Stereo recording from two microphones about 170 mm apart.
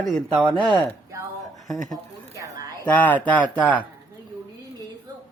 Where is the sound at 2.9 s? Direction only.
10° left (ahead or behind).